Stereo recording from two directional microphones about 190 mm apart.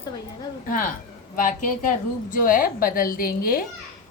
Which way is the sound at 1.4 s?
45° left (ahead or behind).